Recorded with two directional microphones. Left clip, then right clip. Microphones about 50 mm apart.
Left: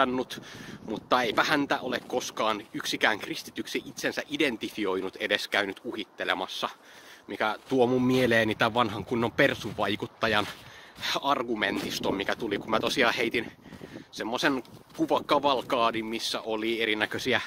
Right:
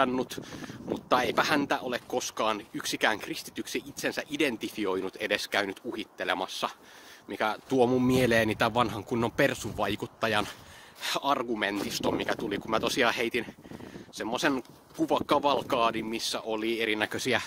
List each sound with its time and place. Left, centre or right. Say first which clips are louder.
0.1 s speech: even; right
6.1 s speech: left 1 dB; right
6.6 s speech: even; right
7.2 s speech: left 1 dB; right
7.7 s speech: even; right
8.7 s speech: left 1 dB; right
9.8 s speech: left 1 dB; centre
11.0 s speech: left 1 dB; right
16.8 s speech: left 2 dB; right
17.1 s speech: left 1 dB; right